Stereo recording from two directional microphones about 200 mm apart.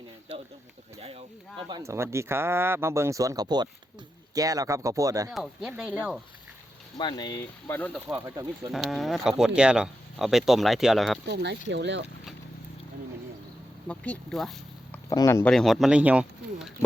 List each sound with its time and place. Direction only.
1.7 s speech: 15° right (ahead or behind)
5.3 s speech: centre (ahead or behind)
6.9 s speech: 20° left (ahead or behind)
7.9 s speech: 10° right (ahead or behind)
8.7 s speech: centre (ahead or behind)
11.7 s speech: 60° right (ahead or behind)
13.8 s speech: 5° left (ahead or behind)
15.1 s speech: 15° left (ahead or behind)
15.5 s speech: centre (ahead or behind)